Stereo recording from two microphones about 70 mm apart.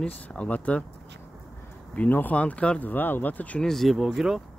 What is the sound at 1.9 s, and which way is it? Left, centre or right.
Speech, left.